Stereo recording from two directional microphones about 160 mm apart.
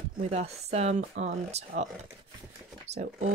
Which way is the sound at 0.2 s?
40° right (ahead or behind).